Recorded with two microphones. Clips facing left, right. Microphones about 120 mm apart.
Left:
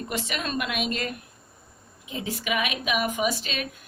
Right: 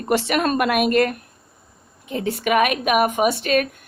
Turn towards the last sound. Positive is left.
turn(degrees=-55)  # may be behind; listen again after turning